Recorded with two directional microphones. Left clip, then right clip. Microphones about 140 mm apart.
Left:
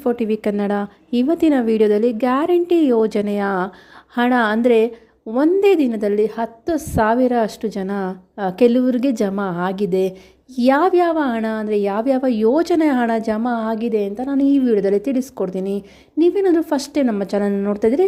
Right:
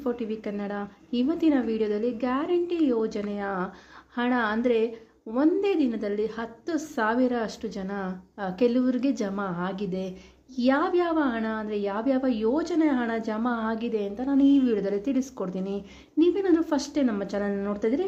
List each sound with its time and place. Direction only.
0.0 s a woman's voice: 60° left (ahead or behind); by 3.7 s 75° left (ahead or behind)
4.1 s a woman's voice: 65° left (ahead or behind)
17.5 s speech: 45° left (ahead or behind)